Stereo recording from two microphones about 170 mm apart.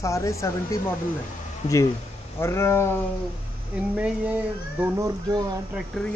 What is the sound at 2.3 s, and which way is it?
Speech, 15° left (ahead or behind).